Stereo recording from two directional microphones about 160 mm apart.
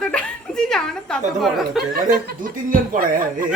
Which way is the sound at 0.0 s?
5° left (ahead or behind).